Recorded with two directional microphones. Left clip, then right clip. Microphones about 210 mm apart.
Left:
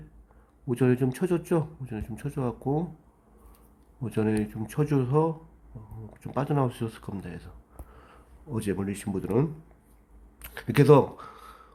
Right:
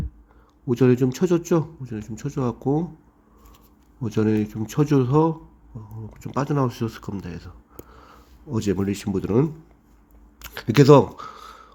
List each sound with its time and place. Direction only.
0.7 s speech: 15° right (ahead or behind)
4.0 s speech: 15° right (ahead or behind)